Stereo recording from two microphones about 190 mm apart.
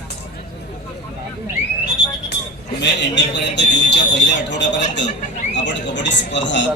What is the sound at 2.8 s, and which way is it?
Speech, 65° left (ahead or behind).